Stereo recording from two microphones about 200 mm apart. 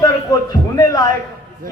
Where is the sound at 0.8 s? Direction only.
20° left (ahead or behind).